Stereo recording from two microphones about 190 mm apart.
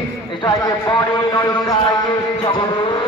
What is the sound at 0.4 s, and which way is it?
A man's voice, 20° left (ahead or behind).